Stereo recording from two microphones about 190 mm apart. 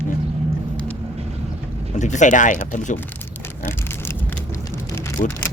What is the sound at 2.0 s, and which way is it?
Speech, 40° left (ahead or behind).